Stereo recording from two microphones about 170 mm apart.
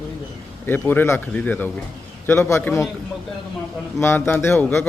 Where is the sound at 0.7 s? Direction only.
10° left (ahead or behind).